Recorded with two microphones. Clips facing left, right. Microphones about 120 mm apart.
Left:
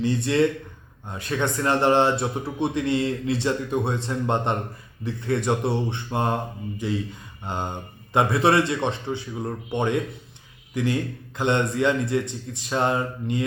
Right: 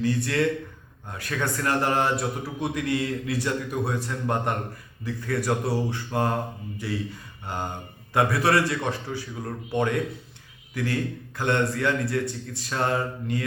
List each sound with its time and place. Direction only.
0.0 s a man's voice: 20° left (ahead or behind)